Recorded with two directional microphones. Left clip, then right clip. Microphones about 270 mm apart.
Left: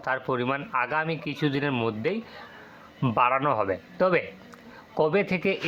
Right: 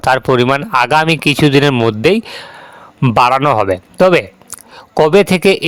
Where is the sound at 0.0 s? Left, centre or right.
Right.